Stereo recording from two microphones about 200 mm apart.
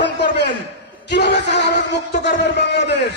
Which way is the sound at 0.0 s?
60° left (ahead or behind).